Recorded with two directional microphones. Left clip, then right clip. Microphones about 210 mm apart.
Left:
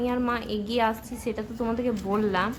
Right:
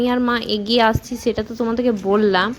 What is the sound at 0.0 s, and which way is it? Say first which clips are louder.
A woman's voice: right 8 dB; 30° right (ahead or behind).